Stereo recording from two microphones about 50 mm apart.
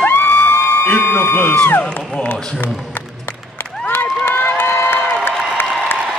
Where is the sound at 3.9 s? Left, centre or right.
Left.